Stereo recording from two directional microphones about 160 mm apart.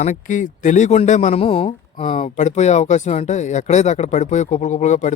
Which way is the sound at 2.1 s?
50° left (ahead or behind).